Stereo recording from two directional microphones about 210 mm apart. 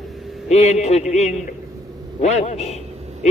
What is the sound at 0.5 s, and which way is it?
A man's voice, 30° left (ahead or behind).